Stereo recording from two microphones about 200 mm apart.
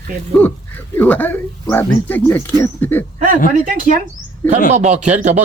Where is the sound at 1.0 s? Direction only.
10° left (ahead or behind).